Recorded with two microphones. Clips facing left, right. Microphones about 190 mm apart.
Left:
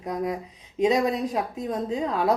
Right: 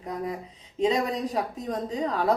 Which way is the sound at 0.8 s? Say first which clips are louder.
Left 3 dB; 10° left (ahead or behind).